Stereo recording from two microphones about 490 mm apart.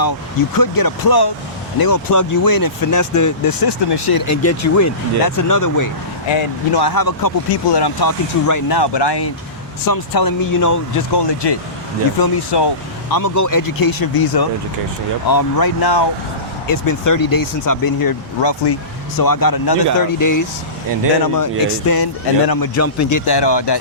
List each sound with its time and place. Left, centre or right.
0.5 s speech: left
4.3 s speech: left
6.3 s speech: left
8.8 s speech: left
11.1 s speech: left